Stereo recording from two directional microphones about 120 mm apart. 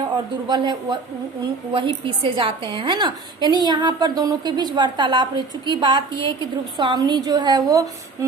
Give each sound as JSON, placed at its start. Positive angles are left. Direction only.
{"t": 0.4, "sound": "a woman's voice", "side_deg": -35}